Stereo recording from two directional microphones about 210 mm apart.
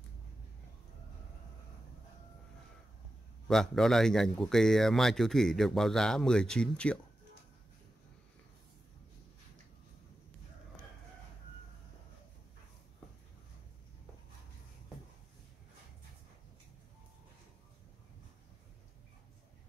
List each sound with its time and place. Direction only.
3.4 s speech: centre (ahead or behind)